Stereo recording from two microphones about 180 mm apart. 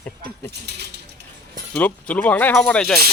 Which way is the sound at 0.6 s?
70° right (ahead or behind).